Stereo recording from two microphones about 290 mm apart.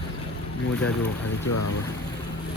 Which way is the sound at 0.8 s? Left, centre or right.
Left.